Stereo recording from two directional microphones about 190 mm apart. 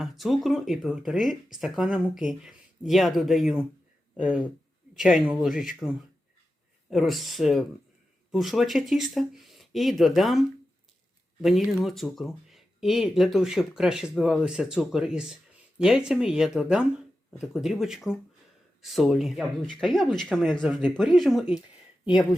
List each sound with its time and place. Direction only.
0.0 s speech: centre (ahead or behind)
4.9 s speech: 5° right (ahead or behind)
6.9 s speech: centre (ahead or behind)
11.4 s speech: centre (ahead or behind)